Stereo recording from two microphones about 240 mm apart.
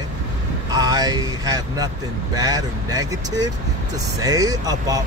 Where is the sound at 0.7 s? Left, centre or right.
Centre.